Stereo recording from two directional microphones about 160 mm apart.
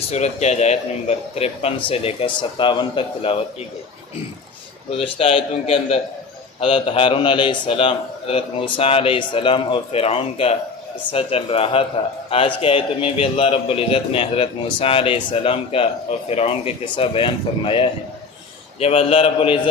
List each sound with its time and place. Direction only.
0.1 s a man's voice: 45° left (ahead or behind)
4.9 s a man's voice: 35° left (ahead or behind)